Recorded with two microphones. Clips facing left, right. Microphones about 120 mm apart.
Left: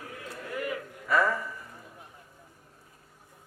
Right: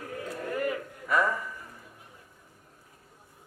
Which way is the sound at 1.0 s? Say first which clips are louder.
Left 1 dB; 15° right (ahead or behind).